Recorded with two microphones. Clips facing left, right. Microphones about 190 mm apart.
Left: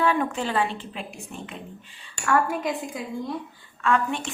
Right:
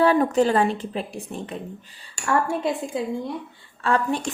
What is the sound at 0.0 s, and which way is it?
A woman's voice, 35° right (ahead or behind).